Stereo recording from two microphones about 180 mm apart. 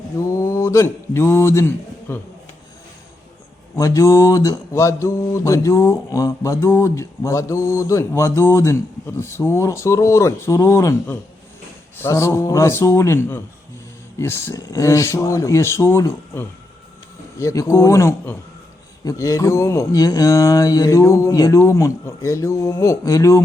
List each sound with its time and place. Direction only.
0.2 s mantra: 15° left (ahead or behind)
3.8 s speech: 20° left (ahead or behind)